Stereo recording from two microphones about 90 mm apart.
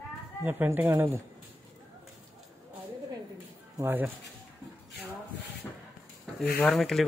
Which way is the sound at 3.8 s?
25° right (ahead or behind).